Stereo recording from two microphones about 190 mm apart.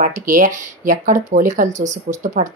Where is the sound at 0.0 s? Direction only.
45° right (ahead or behind).